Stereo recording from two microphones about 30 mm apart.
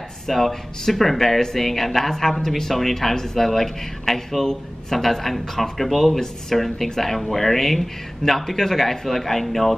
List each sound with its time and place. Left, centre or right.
0.3 s speech: centre